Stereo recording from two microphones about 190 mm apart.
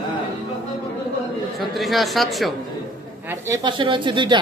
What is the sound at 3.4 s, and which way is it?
Speech, 20° right (ahead or behind).